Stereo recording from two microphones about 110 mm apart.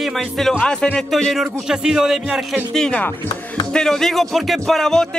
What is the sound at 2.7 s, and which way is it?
Speech, 5° left (ahead or behind).